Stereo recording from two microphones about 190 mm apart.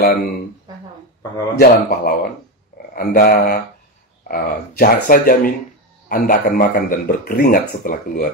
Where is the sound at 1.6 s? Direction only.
50° left (ahead or behind).